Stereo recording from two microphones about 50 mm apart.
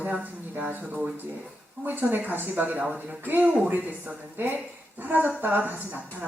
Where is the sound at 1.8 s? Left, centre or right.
Right.